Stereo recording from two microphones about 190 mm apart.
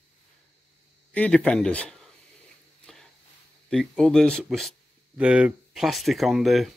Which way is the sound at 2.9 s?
Centre (ahead or behind).